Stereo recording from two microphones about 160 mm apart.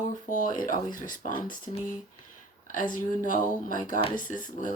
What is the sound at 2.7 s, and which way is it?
Speech, 55° left (ahead or behind).